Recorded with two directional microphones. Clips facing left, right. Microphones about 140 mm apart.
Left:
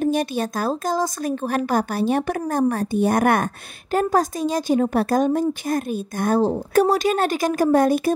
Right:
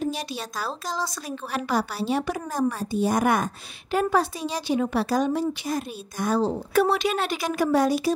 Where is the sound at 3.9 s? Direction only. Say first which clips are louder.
Left 3 dB; 45° left (ahead or behind).